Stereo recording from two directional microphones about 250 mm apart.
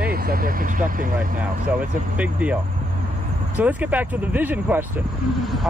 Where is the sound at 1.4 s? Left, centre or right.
Centre.